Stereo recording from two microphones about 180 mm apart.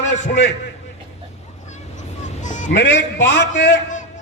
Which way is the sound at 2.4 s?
45° left (ahead or behind).